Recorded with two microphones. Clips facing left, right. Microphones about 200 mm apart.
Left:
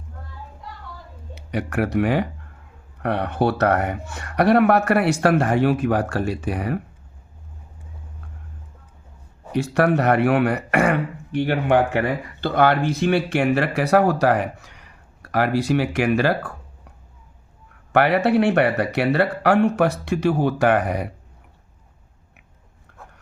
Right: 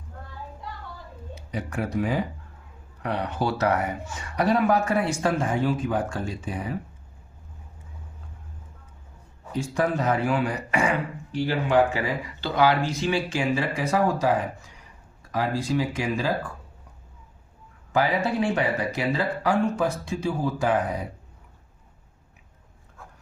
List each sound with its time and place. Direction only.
1.4 s speech: 70° left (ahead or behind)
3.0 s speech: 55° left (ahead or behind)
9.5 s speech: 70° left (ahead or behind)
17.9 s speech: 70° left (ahead or behind)